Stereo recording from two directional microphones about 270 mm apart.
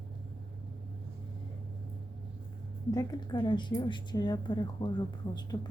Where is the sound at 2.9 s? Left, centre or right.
Centre.